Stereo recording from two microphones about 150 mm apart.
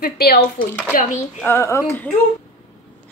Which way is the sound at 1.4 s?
15° left (ahead or behind).